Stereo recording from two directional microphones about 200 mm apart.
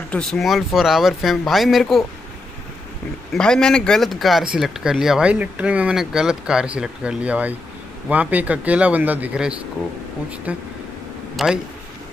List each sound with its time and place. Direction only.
0.1 s speech: centre (ahead or behind)
3.3 s speech: 5° left (ahead or behind)
11.3 s speech: centre (ahead or behind)